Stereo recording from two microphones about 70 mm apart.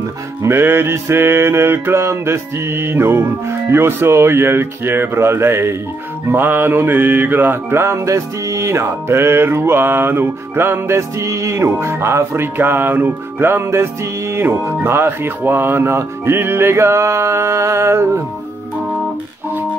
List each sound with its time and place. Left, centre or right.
0.4 s mantra: right